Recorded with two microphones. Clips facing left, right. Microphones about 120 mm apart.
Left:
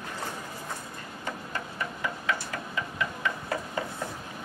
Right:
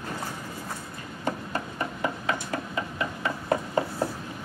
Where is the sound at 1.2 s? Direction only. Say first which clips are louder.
Right 6 dB; 35° right (ahead or behind).